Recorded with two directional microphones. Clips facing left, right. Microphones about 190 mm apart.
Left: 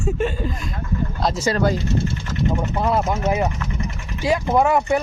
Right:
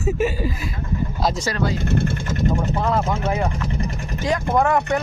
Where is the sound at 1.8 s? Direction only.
55° right (ahead or behind).